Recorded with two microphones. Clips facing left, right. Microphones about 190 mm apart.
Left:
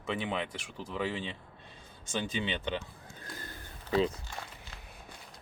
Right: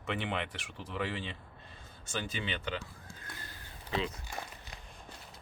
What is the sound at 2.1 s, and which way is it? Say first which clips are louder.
Speech: left 4 dB; 15° left (ahead or behind).